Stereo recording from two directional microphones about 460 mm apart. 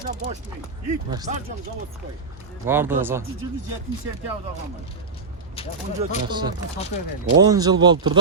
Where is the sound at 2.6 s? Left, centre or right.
Centre.